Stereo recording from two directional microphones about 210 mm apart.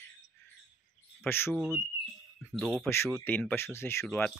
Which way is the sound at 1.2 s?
10° left (ahead or behind).